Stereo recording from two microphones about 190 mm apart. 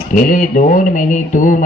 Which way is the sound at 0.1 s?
45° left (ahead or behind).